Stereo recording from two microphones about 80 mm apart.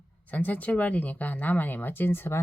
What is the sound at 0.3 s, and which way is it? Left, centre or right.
Speech, left.